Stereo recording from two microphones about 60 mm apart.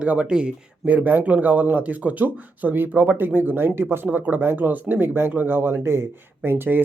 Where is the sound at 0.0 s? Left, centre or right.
Centre.